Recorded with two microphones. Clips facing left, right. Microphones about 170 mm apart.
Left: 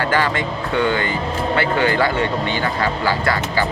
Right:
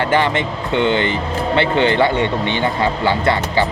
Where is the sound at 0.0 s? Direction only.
20° right (ahead or behind).